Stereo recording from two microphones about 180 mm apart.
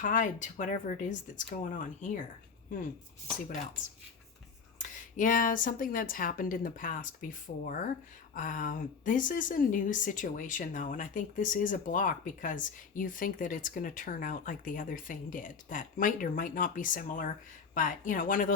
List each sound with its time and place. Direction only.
0.0 s speech: 45° left (ahead or behind)
4.8 s speech: 45° left (ahead or behind)